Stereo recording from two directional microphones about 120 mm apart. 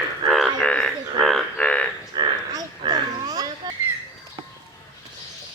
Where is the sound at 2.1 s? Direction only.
35° right (ahead or behind).